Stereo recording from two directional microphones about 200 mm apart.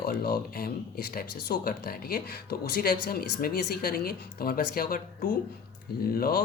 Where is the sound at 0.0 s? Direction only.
50° left (ahead or behind).